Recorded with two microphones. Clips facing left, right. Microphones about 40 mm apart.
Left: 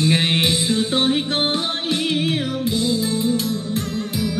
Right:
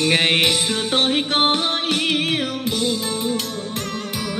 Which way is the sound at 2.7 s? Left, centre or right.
Right.